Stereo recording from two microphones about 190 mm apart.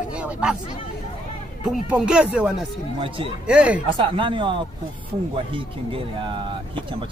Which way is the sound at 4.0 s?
25° right (ahead or behind).